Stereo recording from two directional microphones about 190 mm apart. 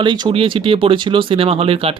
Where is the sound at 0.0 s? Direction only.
25° right (ahead or behind).